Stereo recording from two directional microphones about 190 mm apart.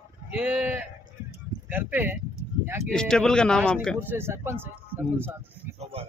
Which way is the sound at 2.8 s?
5° left (ahead or behind).